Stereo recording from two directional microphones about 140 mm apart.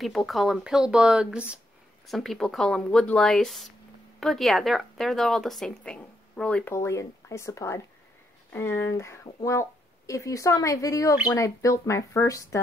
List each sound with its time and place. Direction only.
0.0 s a woman's voice: centre (ahead or behind)
6.7 s speech: 20° left (ahead or behind)